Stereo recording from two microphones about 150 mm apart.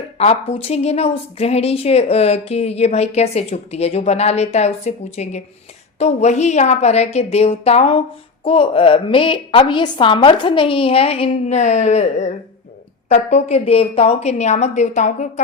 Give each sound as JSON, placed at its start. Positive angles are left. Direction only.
{"t": 0.2, "sound": "a woman's voice", "side_deg": 45}